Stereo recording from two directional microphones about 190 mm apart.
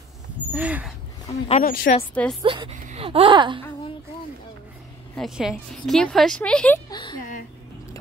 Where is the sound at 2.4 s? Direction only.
25° right (ahead or behind).